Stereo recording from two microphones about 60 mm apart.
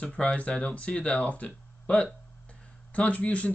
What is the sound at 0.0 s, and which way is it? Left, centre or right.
Speech, left.